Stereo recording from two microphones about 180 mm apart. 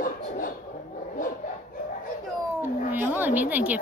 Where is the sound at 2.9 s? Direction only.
10° right (ahead or behind).